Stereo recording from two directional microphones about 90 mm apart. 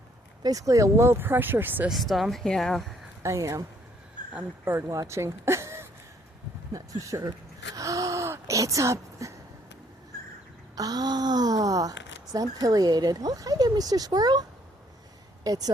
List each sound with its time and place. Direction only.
0.4 s speech: 40° right (ahead or behind); by 1.9 s 20° right (ahead or behind)
1.9 s speech: centre (ahead or behind)
3.2 s speech: 35° right (ahead or behind)
4.6 s speech: 25° right (ahead or behind)
4.9 s speech: 35° right (ahead or behind)
7.0 s speech: 35° right (ahead or behind)
7.8 s a sound: 40° right (ahead or behind)
10.8 s speech: 45° right (ahead or behind)
15.4 s speech: 45° right (ahead or behind)